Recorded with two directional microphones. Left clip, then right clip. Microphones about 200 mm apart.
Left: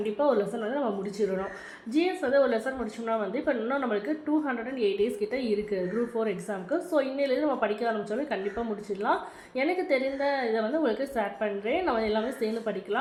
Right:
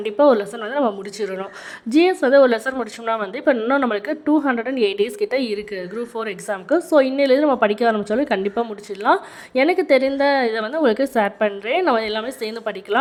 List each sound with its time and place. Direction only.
0.0 s a woman's voice: 60° right (ahead or behind)